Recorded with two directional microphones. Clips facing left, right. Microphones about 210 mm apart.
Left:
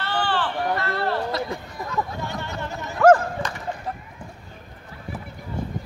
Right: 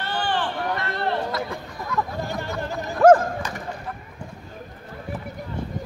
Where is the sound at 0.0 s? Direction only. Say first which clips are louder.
Left 1 dB; 15° right (ahead or behind).